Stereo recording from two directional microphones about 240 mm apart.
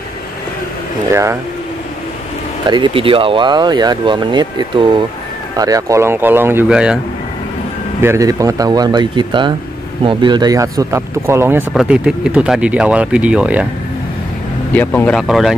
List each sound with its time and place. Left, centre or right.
1.1 s speech: centre
2.6 s speech: centre
8.0 s speech: centre
14.7 s speech: centre